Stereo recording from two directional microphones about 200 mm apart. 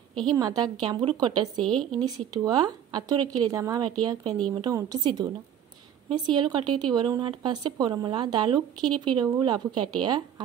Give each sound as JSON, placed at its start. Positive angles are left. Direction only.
{"t": 0.3, "sound": "a woman's voice", "side_deg": -20}
{"t": 1.6, "sound": "speech", "side_deg": 5}
{"t": 2.3, "sound": "a woman's voice", "side_deg": -20}